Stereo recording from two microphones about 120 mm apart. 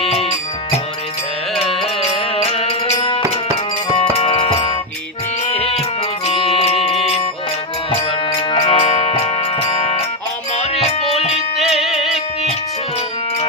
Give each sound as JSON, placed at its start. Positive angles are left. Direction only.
{"t": 1.5, "sound": "music", "side_deg": 5}
{"t": 2.0, "sound": "music", "side_deg": 60}
{"t": 3.0, "sound": "music", "side_deg": 45}
{"t": 6.2, "sound": "music", "side_deg": 50}
{"t": 7.9, "sound": "music", "side_deg": 45}
{"t": 10.5, "sound": "music", "side_deg": 70}
{"t": 11.5, "sound": "music", "side_deg": -5}